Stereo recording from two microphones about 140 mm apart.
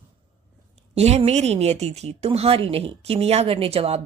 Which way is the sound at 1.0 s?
50° right (ahead or behind).